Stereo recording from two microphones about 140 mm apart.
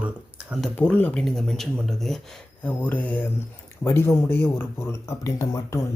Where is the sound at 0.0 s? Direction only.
10° right (ahead or behind).